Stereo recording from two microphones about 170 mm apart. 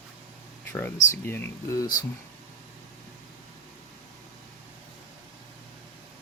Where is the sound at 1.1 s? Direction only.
15° left (ahead or behind).